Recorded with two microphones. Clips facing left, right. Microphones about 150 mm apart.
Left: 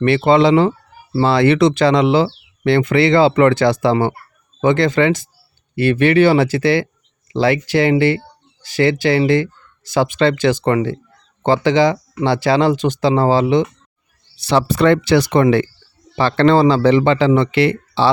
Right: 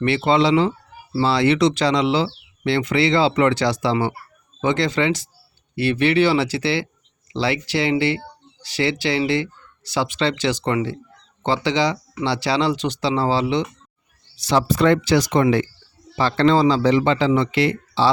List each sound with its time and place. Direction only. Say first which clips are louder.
0.0 s speech: left 5 dB; 55° left (ahead or behind)
14.3 s speech: left 3 dB; 65° left (ahead or behind)